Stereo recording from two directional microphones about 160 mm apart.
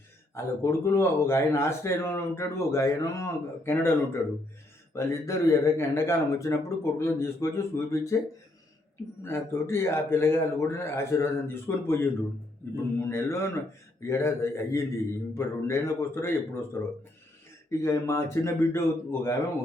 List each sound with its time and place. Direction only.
0.3 s a man's voice: 15° left (ahead or behind)
9.2 s a man's voice: 15° left (ahead or behind)
17.7 s a man's voice: 20° left (ahead or behind)